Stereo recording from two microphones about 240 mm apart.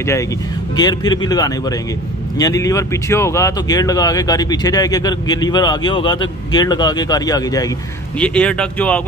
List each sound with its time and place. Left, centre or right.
0.7 s speech: centre
8.2 s speech: centre